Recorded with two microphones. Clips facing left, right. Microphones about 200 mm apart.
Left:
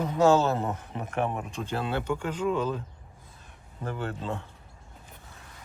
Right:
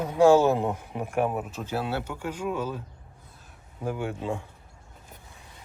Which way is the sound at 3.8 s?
10° right (ahead or behind).